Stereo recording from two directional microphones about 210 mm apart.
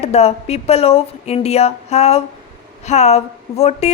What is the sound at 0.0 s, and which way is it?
A woman's voice, 30° left (ahead or behind).